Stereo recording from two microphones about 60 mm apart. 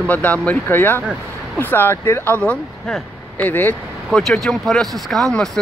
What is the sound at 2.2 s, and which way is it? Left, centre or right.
Speech, left.